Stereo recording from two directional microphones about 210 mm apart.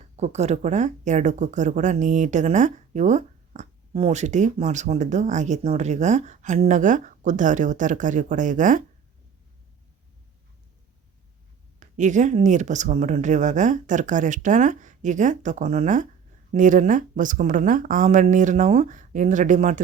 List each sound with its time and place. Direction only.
0.2 s speech: 30° right (ahead or behind)
11.8 s speech: 35° right (ahead or behind)